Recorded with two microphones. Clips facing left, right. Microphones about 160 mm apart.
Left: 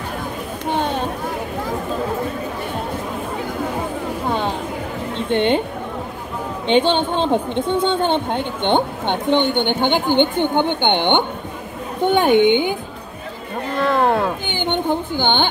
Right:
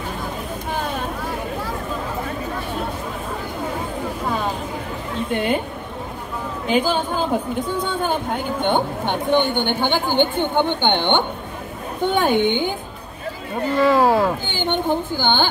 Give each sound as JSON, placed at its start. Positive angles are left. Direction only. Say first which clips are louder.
{"t": 0.7, "sound": "a sound", "louder": "left 6 dB", "side_deg": 30}
{"t": 5.3, "sound": "speech", "louder": "left 4 dB", "side_deg": 30}
{"t": 6.7, "sound": "a woman's voice", "louder": "left 4 dB", "side_deg": 30}
{"t": 13.7, "sound": "speech", "louder": "right 2 dB", "side_deg": -5}
{"t": 14.5, "sound": "speech", "louder": "left 1 dB", "side_deg": 20}